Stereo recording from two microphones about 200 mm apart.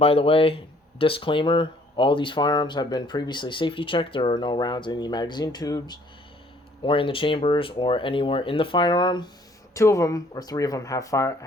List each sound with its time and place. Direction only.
0.0 s speech: 30° left (ahead or behind)